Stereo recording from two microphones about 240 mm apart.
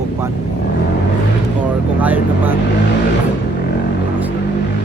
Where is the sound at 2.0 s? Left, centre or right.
Centre.